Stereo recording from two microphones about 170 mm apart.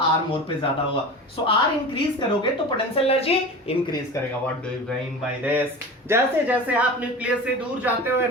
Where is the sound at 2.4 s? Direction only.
30° left (ahead or behind).